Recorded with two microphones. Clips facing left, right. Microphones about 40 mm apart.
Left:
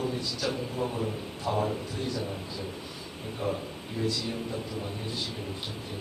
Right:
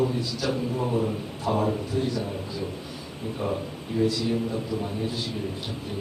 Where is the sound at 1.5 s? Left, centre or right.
Centre.